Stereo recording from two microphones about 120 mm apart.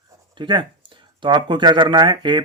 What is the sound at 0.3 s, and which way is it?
Speech, 40° right (ahead or behind).